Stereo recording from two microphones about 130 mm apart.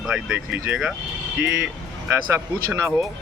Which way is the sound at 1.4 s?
5° right (ahead or behind).